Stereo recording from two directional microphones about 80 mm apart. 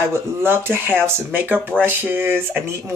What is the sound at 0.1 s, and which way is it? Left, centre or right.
Speech, right.